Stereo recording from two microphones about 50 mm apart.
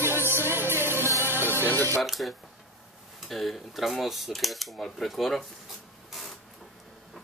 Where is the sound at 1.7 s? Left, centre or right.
Left.